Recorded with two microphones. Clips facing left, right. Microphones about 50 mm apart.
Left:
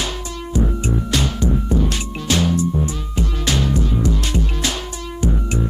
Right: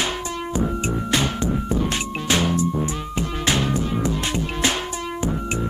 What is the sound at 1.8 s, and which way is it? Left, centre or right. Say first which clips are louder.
Music: even; right.